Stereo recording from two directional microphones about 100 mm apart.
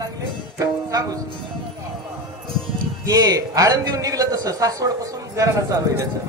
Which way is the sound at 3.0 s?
40° right (ahead or behind).